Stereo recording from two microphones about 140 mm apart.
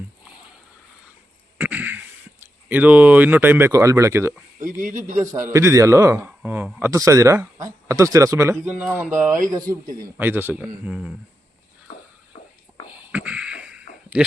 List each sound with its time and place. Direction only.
1.5 s a sound: 10° right (ahead or behind)
3.7 s speech: 20° right (ahead or behind)
4.6 s speech: 65° right (ahead or behind)
5.2 s speech: 20° right (ahead or behind)
6.4 s speech: 10° right (ahead or behind)
13.1 s beatboxing: 10° right (ahead or behind)
14.1 s speech: 10° right (ahead or behind)